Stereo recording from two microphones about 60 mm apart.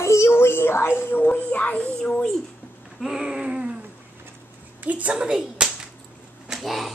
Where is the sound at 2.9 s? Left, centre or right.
Centre.